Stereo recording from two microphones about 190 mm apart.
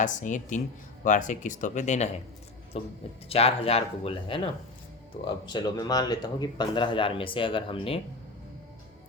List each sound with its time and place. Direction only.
0.0 s speech: 40° left (ahead or behind)